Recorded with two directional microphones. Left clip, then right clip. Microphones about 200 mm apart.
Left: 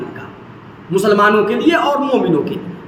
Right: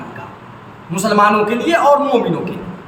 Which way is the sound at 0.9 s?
15° right (ahead or behind).